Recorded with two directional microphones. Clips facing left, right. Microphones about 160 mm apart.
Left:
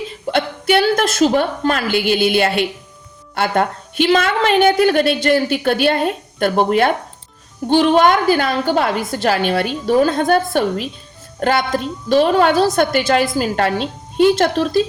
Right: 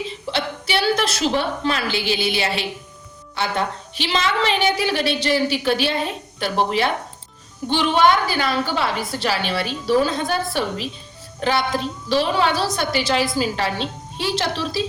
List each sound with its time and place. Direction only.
0.3 s a woman's voice: 50° left (ahead or behind)